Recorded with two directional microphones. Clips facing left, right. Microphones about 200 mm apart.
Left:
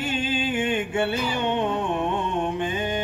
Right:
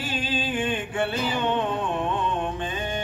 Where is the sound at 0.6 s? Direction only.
25° left (ahead or behind).